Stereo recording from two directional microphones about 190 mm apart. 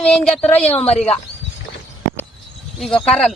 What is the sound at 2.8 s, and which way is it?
Speech, 5° left (ahead or behind).